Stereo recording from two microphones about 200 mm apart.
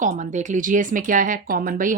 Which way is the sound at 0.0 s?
40° right (ahead or behind).